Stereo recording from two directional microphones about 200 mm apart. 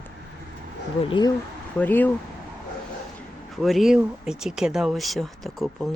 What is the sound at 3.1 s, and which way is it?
Speech, centre (ahead or behind).